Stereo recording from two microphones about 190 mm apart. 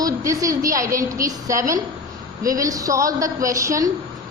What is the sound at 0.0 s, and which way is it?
A woman's voice, 15° right (ahead or behind).